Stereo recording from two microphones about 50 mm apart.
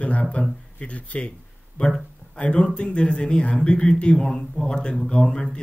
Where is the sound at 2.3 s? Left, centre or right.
Centre.